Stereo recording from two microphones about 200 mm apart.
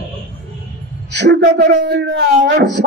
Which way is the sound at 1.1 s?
60° right (ahead or behind).